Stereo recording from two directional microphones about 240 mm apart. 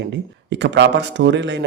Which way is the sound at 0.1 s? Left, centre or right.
Right.